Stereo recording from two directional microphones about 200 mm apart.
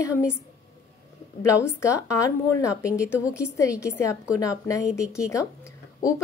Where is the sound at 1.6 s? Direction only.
15° left (ahead or behind).